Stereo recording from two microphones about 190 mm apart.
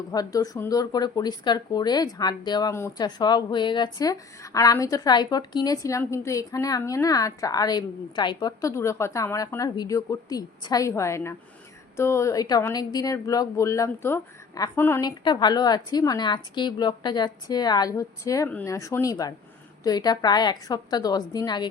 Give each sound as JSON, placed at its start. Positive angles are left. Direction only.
{"t": 0.1, "sound": "speech", "side_deg": 20}
{"t": 15.2, "sound": "speech", "side_deg": 25}